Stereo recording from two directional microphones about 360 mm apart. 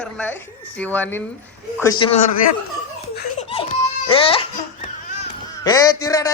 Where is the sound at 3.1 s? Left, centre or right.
Centre.